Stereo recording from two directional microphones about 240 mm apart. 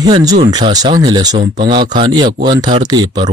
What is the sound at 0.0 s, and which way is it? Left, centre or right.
Speech, centre.